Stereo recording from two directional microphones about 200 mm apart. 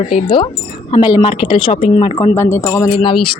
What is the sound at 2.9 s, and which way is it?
Speech, 25° left (ahead or behind).